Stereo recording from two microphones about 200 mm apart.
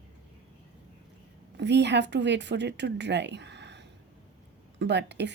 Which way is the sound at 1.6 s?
60° right (ahead or behind).